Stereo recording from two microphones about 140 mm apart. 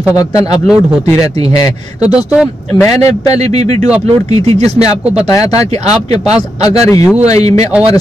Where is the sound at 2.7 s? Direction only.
25° left (ahead or behind).